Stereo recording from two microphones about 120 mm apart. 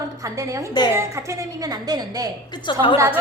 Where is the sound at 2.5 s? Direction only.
40° left (ahead or behind).